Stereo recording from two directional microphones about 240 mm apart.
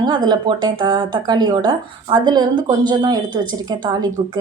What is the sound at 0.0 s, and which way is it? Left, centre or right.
A woman's voice, centre.